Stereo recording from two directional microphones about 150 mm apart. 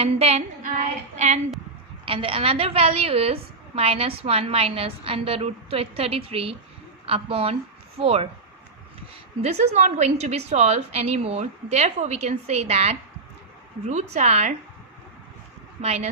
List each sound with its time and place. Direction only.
0.0 s a sound: 45° right (ahead or behind)
2.0 s a woman's voice: 35° right (ahead or behind)
9.4 s a woman's voice: 45° right (ahead or behind)
15.8 s a woman's voice: 45° right (ahead or behind)